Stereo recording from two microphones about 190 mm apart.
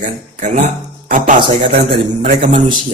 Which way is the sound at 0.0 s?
40° right (ahead or behind).